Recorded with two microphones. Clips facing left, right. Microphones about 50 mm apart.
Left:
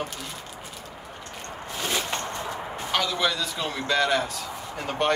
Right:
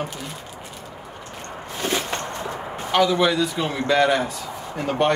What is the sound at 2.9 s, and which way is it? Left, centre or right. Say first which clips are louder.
A man's voice: right 7 dB; centre.